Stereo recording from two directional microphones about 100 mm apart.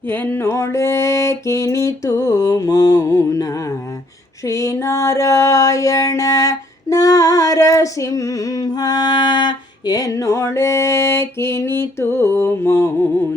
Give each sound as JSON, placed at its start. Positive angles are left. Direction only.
{"t": 0.1, "sound": "mantra", "side_deg": 20}
{"t": 4.4, "sound": "music", "side_deg": 30}